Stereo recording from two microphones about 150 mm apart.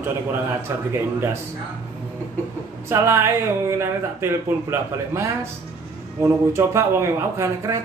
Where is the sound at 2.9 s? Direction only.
20° right (ahead or behind).